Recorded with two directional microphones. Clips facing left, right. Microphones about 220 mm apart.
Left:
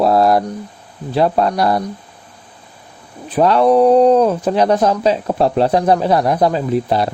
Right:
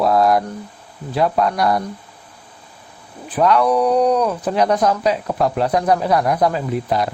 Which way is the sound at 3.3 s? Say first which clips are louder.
Left 4 dB; 30° left (ahead or behind).